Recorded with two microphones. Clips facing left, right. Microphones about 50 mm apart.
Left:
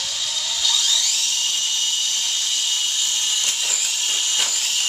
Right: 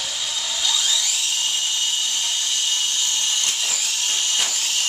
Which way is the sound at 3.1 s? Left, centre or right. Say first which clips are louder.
Even; centre.